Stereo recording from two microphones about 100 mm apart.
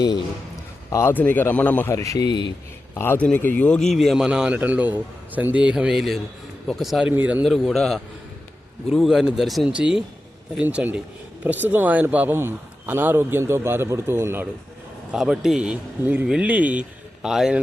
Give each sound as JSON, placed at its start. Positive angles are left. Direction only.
{"t": 0.9, "sound": "speech", "side_deg": 30}
{"t": 1.1, "sound": "a man's voice", "side_deg": 15}
{"t": 1.9, "sound": "a man's voice", "side_deg": 30}
{"t": 2.9, "sound": "a man's voice", "side_deg": 20}
{"t": 3.8, "sound": "a man's voice", "side_deg": 0}
{"t": 7.2, "sound": "a man's voice", "side_deg": -15}
{"t": 7.4, "sound": "speech", "side_deg": 0}
{"t": 9.6, "sound": "a man's voice", "side_deg": -10}
{"t": 15.1, "sound": "a man's voice", "side_deg": -5}